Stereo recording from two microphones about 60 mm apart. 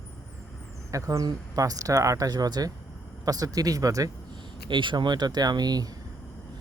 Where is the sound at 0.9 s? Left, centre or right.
Right.